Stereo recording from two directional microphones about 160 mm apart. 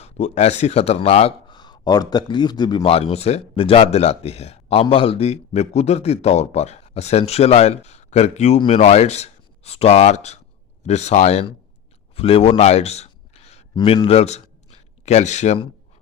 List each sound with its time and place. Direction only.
0.0 s speech: 45° left (ahead or behind)
12.1 s a sound: 35° left (ahead or behind)
13.7 s a man's voice: 35° left (ahead or behind)